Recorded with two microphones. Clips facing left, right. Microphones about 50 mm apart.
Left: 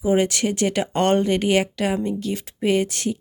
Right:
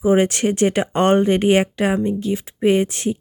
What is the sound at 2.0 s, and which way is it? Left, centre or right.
Speech, centre.